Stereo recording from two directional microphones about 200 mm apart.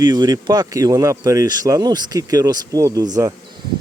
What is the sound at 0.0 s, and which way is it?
Speech, 20° right (ahead or behind).